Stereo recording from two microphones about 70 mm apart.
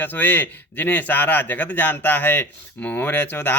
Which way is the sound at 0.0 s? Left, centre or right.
Left.